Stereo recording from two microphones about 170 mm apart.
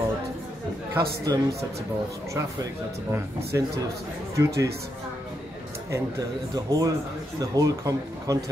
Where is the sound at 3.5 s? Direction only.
20° right (ahead or behind).